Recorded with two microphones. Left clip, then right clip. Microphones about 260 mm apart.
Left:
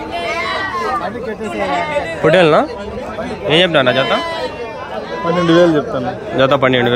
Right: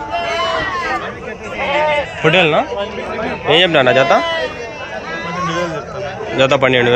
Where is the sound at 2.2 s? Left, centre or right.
Centre.